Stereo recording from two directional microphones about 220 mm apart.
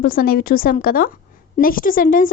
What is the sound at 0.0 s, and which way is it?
Speech, 40° left (ahead or behind).